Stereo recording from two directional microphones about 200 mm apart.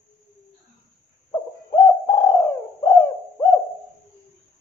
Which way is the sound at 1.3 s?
15° left (ahead or behind).